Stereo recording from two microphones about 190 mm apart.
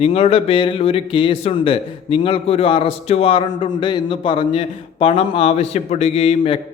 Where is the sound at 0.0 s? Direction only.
30° left (ahead or behind).